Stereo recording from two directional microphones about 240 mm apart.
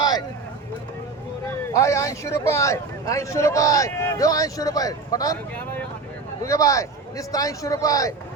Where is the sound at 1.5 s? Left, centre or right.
Centre.